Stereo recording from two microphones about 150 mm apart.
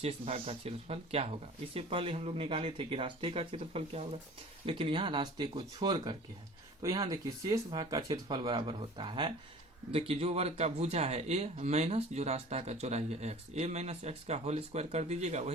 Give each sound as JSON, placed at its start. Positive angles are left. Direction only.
{"t": 0.0, "sound": "speech", "side_deg": -40}